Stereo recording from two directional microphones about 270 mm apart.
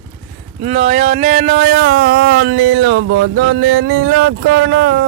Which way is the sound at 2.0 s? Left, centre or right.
Right.